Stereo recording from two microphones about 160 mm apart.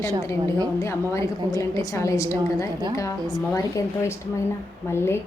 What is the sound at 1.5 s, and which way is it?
A woman's voice, 20° left (ahead or behind).